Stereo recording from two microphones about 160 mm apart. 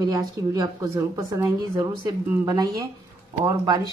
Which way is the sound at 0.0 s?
25° right (ahead or behind).